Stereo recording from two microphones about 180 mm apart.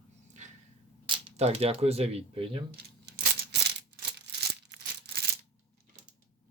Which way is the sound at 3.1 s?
70° right (ahead or behind).